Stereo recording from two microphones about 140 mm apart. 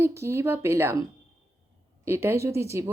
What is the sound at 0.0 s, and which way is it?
Speech, 20° right (ahead or behind).